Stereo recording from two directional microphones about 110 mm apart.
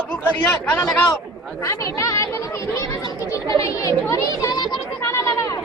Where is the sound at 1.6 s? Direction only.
30° left (ahead or behind).